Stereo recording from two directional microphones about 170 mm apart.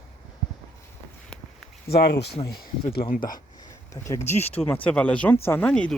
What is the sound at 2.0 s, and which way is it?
Speech, 75° left (ahead or behind).